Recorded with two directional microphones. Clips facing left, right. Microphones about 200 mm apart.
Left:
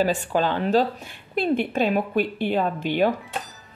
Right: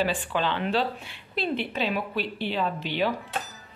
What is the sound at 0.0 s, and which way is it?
Speech, 40° left (ahead or behind).